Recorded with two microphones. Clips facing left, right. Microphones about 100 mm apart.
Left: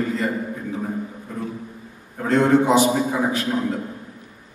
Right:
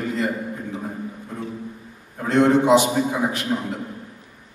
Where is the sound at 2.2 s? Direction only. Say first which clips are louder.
Even; 20° right (ahead or behind).